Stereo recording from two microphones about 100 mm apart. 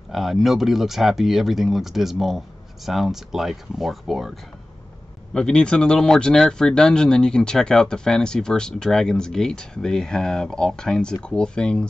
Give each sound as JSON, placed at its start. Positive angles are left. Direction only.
{"t": 0.1, "sound": "speech", "side_deg": 0}
{"t": 5.3, "sound": "speech", "side_deg": 10}